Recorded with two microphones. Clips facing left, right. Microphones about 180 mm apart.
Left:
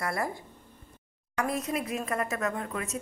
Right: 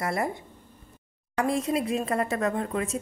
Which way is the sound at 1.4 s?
30° right (ahead or behind).